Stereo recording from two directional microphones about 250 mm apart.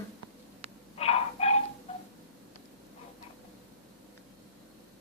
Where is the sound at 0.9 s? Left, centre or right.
Left.